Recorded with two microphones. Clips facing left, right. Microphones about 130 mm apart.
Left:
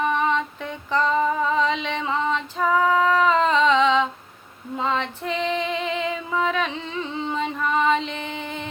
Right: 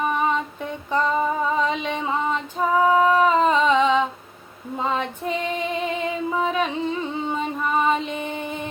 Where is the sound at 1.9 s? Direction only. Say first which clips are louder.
Even; 10° right (ahead or behind).